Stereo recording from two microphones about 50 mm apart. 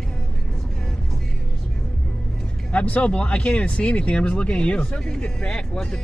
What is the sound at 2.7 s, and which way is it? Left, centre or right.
Speech, left.